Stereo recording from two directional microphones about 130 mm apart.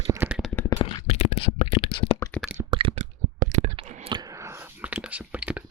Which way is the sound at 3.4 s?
65° right (ahead or behind).